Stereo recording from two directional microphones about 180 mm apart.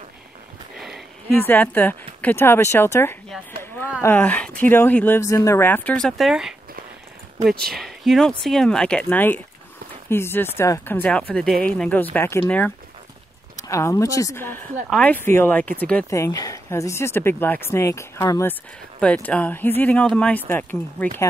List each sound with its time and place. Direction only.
0.7 s a sound: centre (ahead or behind)
1.3 s speech: 10° left (ahead or behind)
7.7 s speech: centre (ahead or behind)
16.1 s speech: 20° left (ahead or behind)